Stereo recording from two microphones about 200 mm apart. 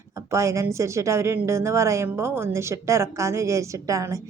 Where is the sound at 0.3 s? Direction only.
15° right (ahead or behind).